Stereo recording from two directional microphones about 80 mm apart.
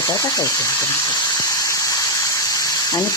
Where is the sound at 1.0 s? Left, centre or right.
Left.